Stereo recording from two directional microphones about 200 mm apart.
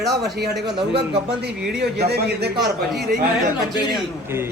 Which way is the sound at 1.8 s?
55° right (ahead or behind).